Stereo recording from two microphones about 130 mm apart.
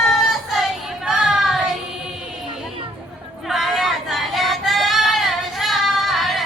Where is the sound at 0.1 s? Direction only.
Centre (ahead or behind).